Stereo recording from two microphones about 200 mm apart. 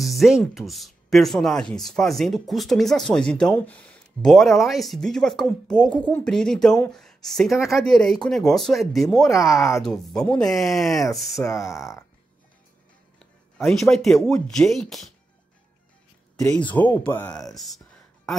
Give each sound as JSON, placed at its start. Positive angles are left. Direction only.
{"t": 0.0, "sound": "speech", "side_deg": 0}
{"t": 11.3, "sound": "speech", "side_deg": 15}
{"t": 13.6, "sound": "speech", "side_deg": 0}
{"t": 16.7, "sound": "speech", "side_deg": 10}